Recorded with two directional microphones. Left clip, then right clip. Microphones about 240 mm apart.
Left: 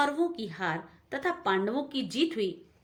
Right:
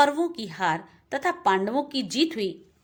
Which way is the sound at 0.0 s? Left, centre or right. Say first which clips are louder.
Right 6 dB; right.